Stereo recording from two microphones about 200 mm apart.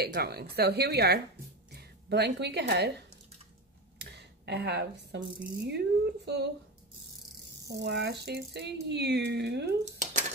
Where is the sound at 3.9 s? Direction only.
55° right (ahead or behind).